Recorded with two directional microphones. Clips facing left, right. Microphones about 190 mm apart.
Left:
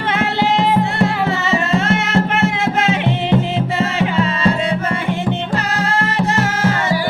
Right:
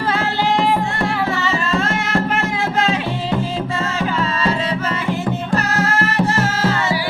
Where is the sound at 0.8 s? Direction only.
20° left (ahead or behind).